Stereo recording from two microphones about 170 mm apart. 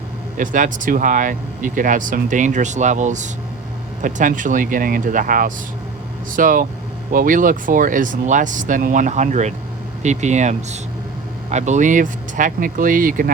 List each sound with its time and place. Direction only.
0.3 s speech: 50° right (ahead or behind)